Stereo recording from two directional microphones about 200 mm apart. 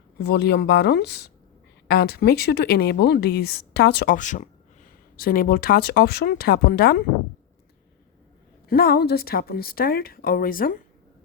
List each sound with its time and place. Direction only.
0.2 s speech: 55° left (ahead or behind)
8.7 s speech: 50° left (ahead or behind)